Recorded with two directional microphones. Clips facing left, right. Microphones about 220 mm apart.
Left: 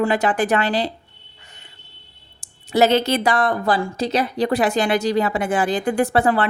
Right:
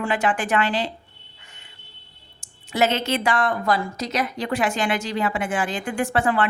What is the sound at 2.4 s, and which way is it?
A woman's voice, 35° left (ahead or behind).